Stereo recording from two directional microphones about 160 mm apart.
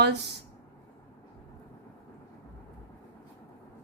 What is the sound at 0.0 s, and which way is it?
Speech, 90° right.